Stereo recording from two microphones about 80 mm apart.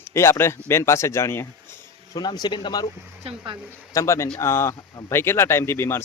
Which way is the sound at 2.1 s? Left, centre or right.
Left.